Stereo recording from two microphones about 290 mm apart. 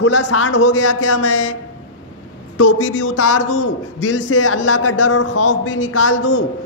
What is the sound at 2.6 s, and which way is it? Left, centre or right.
A man's voice, left.